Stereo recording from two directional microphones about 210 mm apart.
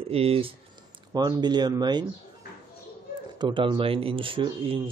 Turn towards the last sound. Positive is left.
turn(degrees=-25)  # may be behind; listen again after turning